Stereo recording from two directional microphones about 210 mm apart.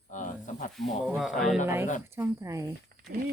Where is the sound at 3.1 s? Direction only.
50° right (ahead or behind).